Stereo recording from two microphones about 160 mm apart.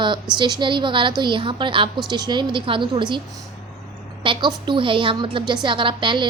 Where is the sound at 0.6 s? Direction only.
30° right (ahead or behind).